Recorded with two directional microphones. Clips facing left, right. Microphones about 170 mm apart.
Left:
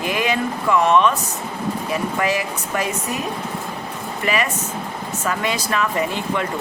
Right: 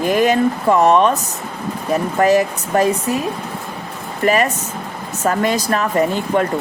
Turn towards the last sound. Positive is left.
turn(degrees=-45)  # may be behind; listen again after turning